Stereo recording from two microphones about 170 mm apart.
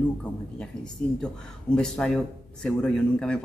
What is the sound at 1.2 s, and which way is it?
Speech, 5° left (ahead or behind).